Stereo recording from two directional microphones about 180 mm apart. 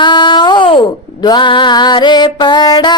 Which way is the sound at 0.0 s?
25° left (ahead or behind).